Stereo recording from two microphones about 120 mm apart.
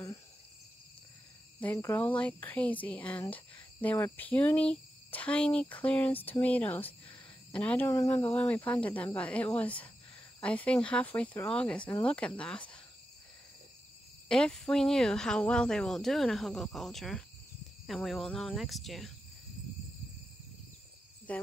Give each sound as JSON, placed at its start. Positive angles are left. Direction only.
{"t": 1.6, "sound": "speech", "side_deg": 20}
{"t": 7.1, "sound": "a sound", "side_deg": 10}
{"t": 7.9, "sound": "speech", "side_deg": 25}
{"t": 8.3, "sound": "speech", "side_deg": 15}
{"t": 14.3, "sound": "speech", "side_deg": 5}
{"t": 21.3, "sound": "speech", "side_deg": 10}